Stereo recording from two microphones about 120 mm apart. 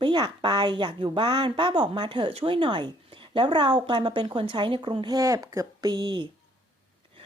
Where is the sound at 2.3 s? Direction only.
50° right (ahead or behind).